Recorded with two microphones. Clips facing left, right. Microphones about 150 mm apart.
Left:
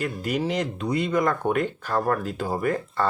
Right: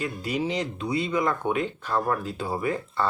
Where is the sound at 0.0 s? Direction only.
50° left (ahead or behind).